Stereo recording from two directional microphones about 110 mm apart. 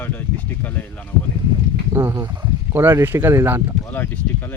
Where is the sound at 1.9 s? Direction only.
30° right (ahead or behind).